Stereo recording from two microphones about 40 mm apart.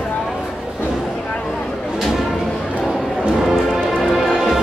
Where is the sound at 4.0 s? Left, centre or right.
Centre.